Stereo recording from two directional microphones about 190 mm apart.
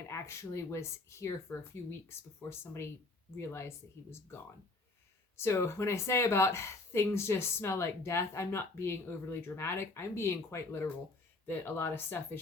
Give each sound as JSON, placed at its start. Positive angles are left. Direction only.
{"t": 0.1, "sound": "speech", "side_deg": 15}
{"t": 5.4, "sound": "speech", "side_deg": 15}